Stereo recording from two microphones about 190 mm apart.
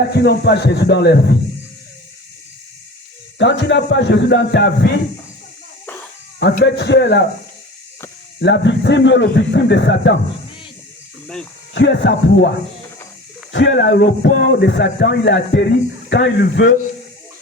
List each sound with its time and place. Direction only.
0.1 s speech: 60° left (ahead or behind)
3.3 s speech: 70° left (ahead or behind)
6.7 s speech: 65° left (ahead or behind)
8.4 s speech: 65° left (ahead or behind)
11.7 s speech: 75° left (ahead or behind)
13.5 s speech: 70° left (ahead or behind)